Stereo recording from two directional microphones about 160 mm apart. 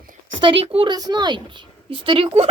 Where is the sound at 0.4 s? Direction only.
35° right (ahead or behind).